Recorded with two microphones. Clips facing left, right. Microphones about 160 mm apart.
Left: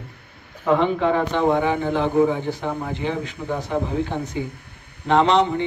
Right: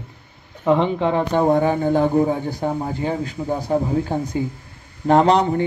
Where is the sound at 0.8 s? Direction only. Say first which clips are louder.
Even; 30° right (ahead or behind).